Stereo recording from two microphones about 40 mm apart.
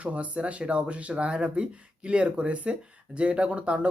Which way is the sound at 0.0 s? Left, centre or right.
Right.